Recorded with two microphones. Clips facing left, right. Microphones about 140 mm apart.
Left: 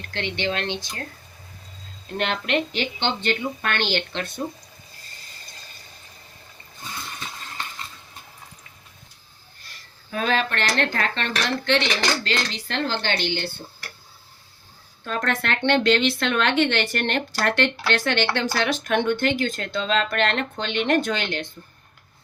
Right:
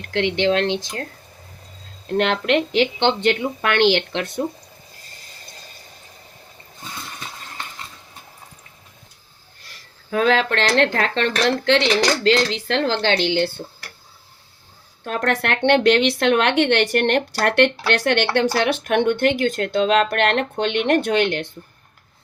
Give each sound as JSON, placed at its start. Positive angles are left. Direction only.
{"t": 0.0, "sound": "speech", "side_deg": -90}
{"t": 2.1, "sound": "a woman's voice", "side_deg": -70}
{"t": 10.1, "sound": "speech", "side_deg": -90}
{"t": 15.0, "sound": "speech", "side_deg": -65}